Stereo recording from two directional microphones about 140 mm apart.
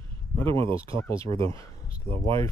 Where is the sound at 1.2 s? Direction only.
40° right (ahead or behind).